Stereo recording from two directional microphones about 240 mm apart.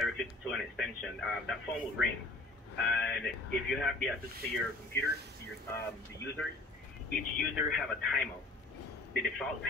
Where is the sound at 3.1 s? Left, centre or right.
Centre.